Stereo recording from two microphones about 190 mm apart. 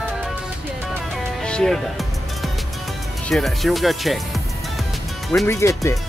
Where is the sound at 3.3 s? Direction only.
5° left (ahead or behind).